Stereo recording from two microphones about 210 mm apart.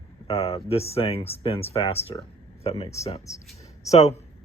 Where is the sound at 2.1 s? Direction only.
25° left (ahead or behind).